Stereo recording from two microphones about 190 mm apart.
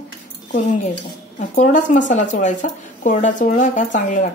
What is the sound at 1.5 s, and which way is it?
Speech, 40° left (ahead or behind).